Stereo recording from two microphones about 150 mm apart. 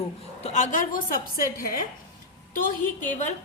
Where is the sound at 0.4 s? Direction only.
50° left (ahead or behind); by 1.9 s 70° left (ahead or behind).